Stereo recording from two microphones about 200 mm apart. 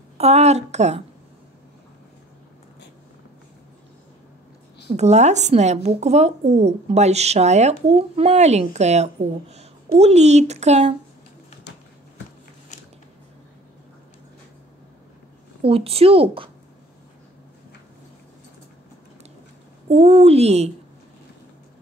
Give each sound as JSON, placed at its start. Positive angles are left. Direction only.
{"t": 0.2, "sound": "speech", "side_deg": -35}
{"t": 4.8, "sound": "speech", "side_deg": -35}
{"t": 15.6, "sound": "a woman's voice", "side_deg": -30}
{"t": 19.9, "sound": "speech", "side_deg": -30}